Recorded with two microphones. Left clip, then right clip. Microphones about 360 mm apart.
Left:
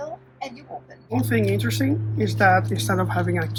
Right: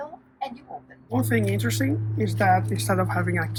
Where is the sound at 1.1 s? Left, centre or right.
Centre.